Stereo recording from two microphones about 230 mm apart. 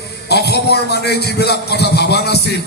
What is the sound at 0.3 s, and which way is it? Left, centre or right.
A man's voice, left.